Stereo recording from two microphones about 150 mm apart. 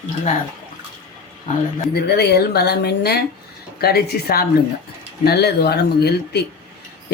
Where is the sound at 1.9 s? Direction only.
90° left.